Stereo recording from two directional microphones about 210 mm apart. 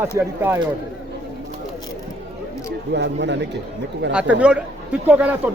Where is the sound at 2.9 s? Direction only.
55° right (ahead or behind).